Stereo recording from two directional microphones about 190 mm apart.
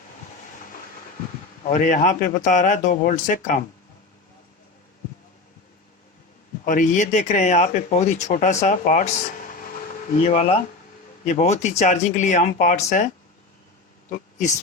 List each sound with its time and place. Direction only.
1.7 s speech: 40° left (ahead or behind)
6.7 s speech: 40° left (ahead or behind)
10.2 s speech: 35° left (ahead or behind)
14.1 s a sound: 40° left (ahead or behind)